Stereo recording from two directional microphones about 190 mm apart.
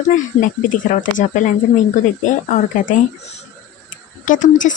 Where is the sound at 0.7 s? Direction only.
40° left (ahead or behind).